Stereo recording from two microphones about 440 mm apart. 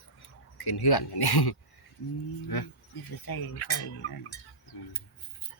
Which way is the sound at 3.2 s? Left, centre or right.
Left.